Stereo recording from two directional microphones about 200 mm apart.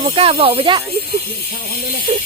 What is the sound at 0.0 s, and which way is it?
Speech, 30° right (ahead or behind).